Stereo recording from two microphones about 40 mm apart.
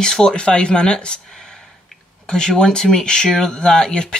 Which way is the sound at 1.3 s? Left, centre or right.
Centre.